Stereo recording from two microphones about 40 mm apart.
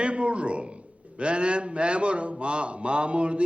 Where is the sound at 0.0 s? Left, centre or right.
Right.